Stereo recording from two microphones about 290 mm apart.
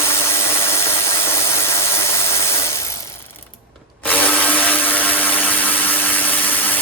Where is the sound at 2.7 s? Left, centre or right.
Centre.